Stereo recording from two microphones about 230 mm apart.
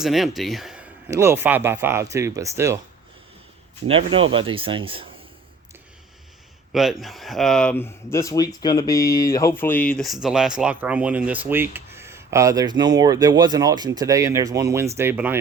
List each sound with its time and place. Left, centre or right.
0.0 s speech: centre
3.8 s speech: right
7.0 s speech: centre